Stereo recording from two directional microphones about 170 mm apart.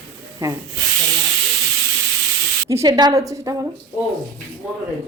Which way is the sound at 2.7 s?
20° right (ahead or behind).